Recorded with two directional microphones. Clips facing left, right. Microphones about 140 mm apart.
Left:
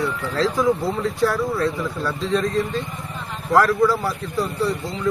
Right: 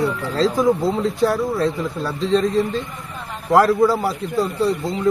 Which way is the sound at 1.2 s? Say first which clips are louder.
Right 1 dB; 25° right (ahead or behind).